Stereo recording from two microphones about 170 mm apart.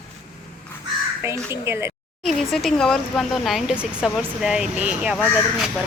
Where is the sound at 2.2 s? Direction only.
Centre (ahead or behind).